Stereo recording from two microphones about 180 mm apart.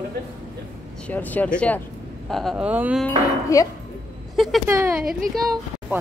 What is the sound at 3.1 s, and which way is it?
Speech, 20° left (ahead or behind).